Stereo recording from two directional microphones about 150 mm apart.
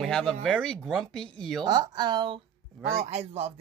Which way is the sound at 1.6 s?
30° right (ahead or behind).